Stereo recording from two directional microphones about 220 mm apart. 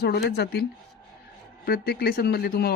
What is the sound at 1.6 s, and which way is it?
Speech, 45° left (ahead or behind).